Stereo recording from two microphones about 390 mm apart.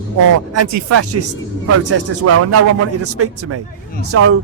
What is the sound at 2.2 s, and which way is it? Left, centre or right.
Speech, right.